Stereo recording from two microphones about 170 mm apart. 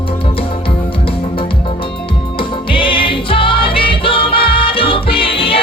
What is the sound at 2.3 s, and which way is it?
Music, 30° left (ahead or behind).